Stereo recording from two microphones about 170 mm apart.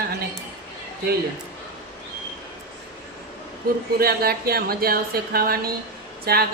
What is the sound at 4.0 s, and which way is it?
Speech, 65° right (ahead or behind).